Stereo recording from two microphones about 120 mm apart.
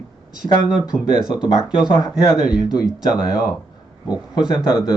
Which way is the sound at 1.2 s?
5° right (ahead or behind).